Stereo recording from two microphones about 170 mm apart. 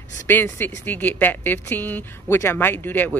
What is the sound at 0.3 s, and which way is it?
Speech, 10° left (ahead or behind).